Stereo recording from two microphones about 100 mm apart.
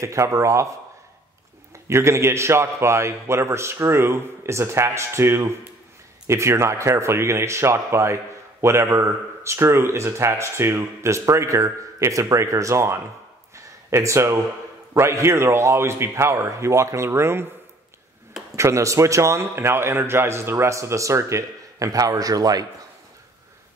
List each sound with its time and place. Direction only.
0.0 s speech: 30° right (ahead or behind)
1.9 s speech: 25° right (ahead or behind)
13.6 s a sound: 30° right (ahead or behind)
15.0 s speech: 30° right (ahead or behind)
18.6 s speech: 30° right (ahead or behind)